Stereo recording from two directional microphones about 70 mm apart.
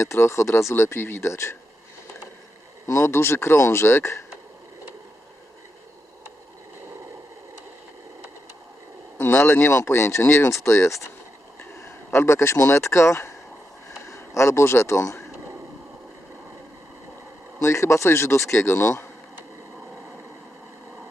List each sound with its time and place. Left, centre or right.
0.0 s speech: left
2.8 s speech: left
9.2 s a man's voice: left
17.6 s speech: left